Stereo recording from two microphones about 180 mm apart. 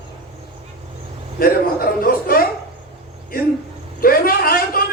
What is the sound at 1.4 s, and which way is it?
A man's voice, 55° left (ahead or behind).